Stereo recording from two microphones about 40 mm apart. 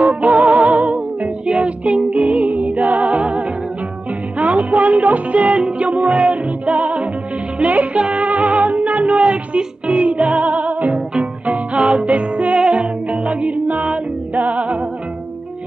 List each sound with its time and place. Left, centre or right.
0.0 s music: right
1.5 s music: right